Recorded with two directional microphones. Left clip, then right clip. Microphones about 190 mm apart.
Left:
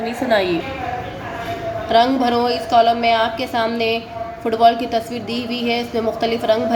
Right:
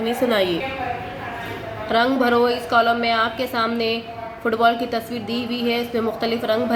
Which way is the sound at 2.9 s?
5° right (ahead or behind).